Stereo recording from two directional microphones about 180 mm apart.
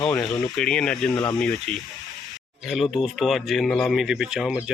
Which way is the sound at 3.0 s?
Centre (ahead or behind).